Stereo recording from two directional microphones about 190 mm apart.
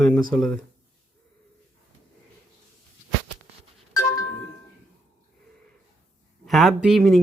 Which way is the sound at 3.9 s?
20° left (ahead or behind).